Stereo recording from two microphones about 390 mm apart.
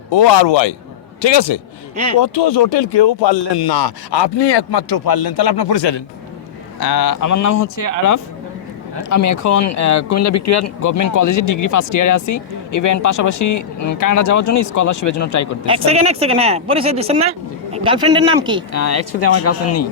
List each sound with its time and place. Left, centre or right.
0.1 s a man's voice: left
15.6 s speech: centre
18.7 s speech: left